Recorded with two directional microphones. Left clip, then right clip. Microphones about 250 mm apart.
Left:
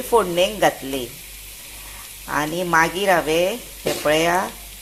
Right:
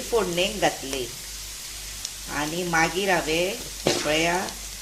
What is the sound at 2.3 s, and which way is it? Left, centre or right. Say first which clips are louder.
A woman's voice: left 6 dB; centre.